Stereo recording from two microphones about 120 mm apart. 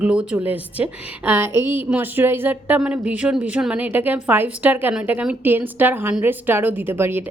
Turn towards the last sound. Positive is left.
turn(degrees=-20)  # may be behind; listen again after turning